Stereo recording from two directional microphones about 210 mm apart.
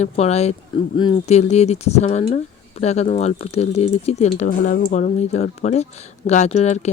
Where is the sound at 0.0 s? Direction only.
30° left (ahead or behind).